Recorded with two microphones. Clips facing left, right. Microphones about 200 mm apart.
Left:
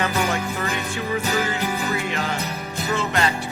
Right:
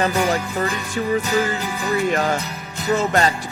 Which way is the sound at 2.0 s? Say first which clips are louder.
Right 7 dB; 45° right (ahead or behind).